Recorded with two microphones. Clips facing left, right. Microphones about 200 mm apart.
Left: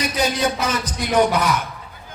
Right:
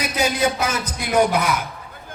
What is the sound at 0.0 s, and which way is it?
A man's voice, 10° right (ahead or behind).